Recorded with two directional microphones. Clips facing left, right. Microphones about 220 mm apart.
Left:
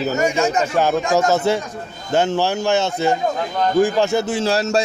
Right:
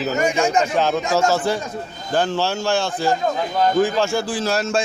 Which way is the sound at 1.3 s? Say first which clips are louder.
Left 3 dB; 25° left (ahead or behind).